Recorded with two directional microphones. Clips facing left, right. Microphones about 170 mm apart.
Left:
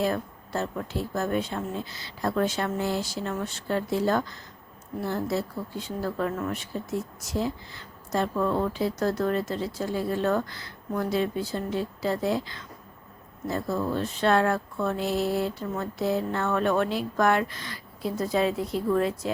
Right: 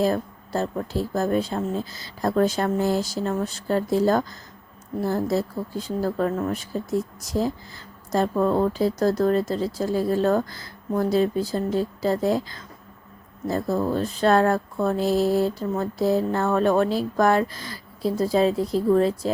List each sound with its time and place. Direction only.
0.0 s speech: 35° right (ahead or behind)